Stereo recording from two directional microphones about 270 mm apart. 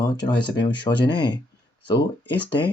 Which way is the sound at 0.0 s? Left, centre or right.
Centre.